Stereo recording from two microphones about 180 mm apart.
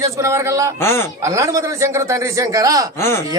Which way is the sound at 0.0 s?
15° right (ahead or behind).